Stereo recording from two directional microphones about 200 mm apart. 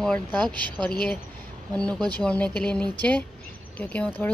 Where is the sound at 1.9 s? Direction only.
20° right (ahead or behind).